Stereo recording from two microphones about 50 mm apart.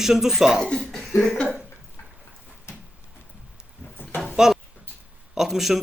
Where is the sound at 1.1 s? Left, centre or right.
Left.